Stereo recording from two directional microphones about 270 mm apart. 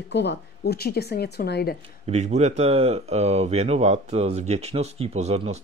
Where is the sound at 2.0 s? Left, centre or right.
Right.